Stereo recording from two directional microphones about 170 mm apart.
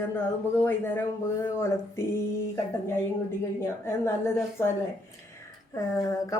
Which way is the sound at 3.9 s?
15° left (ahead or behind).